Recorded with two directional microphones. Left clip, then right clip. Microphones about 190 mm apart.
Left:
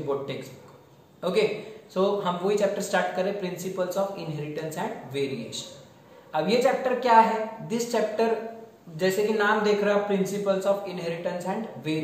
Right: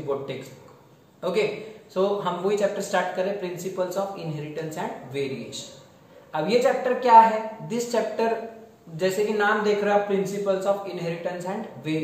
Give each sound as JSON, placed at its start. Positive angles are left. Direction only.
{"t": 2.0, "sound": "speech", "side_deg": -5}